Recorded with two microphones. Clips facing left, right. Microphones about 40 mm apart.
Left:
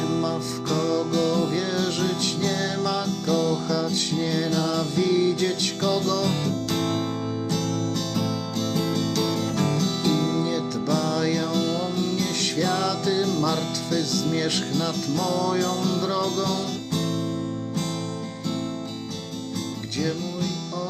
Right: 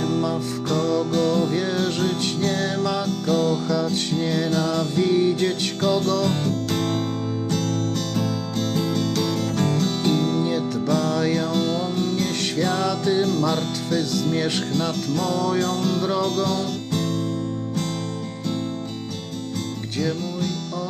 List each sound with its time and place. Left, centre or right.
0.0 s music: right
6.7 s music: centre
8.1 s music: centre
20.0 s music: centre